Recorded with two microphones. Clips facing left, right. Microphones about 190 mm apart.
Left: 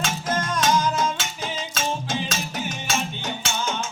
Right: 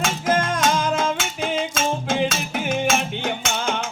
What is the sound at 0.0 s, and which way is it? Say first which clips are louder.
Music: right 5 dB; 50° right (ahead or behind).